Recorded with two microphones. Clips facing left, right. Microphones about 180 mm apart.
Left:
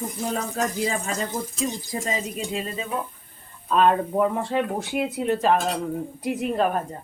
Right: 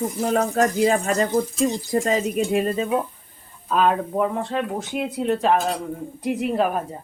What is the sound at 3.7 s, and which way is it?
Speech, centre (ahead or behind).